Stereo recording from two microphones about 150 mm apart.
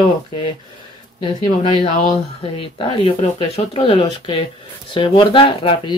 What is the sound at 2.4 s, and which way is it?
Speech, 35° left (ahead or behind).